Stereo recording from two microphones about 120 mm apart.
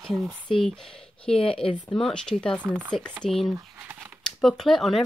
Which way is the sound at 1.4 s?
50° left (ahead or behind).